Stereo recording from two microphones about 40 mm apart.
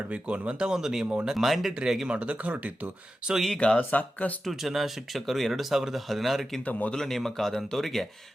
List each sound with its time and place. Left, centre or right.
0.1 s speech: right
0.7 s speech: centre
1.5 s speech: centre
1.7 s speech: centre
2.0 s speech: right
3.2 s speech: right
3.8 s speech: left
4.6 s speech: centre
6.7 s speech: left
6.9 s speech: centre